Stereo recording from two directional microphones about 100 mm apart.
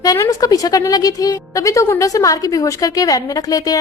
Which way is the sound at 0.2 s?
35° left (ahead or behind).